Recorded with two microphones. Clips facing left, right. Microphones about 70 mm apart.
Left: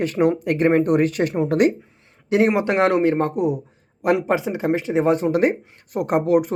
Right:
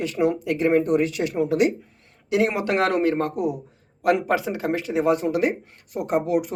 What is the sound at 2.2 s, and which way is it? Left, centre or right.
A man's voice, left.